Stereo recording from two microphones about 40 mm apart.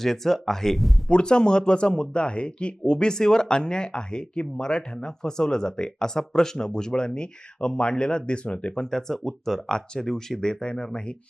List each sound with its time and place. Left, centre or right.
0.0 s speech: centre
0.8 s speech: centre
1.1 s speech: left
9.6 s speech: centre